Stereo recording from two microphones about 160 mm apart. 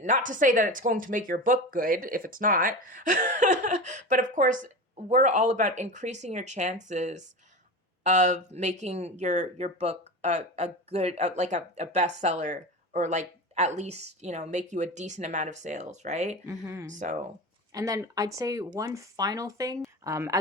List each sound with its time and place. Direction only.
0.0 s speech: 55° right (ahead or behind)
16.5 s speech: 20° right (ahead or behind)
16.9 s speech: 50° right (ahead or behind)
17.7 s speech: 20° right (ahead or behind)